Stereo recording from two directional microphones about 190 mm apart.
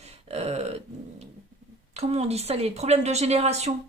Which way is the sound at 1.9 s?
35° right (ahead or behind).